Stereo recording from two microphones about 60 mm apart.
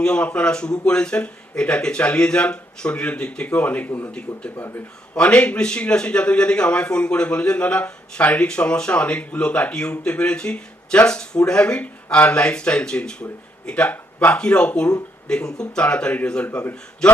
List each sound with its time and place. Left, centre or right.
0.0 s a man's voice: centre; by 4.8 s left
5.1 s a man's voice: left
13.9 s speech: left
14.3 s a man's voice: centre
16.5 s a man's voice: left